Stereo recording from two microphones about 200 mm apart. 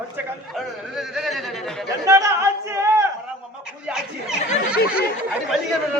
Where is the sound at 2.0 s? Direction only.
15° right (ahead or behind).